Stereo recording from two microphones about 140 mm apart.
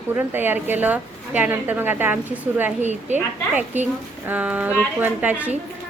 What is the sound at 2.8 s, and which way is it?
Speech, 55° right (ahead or behind).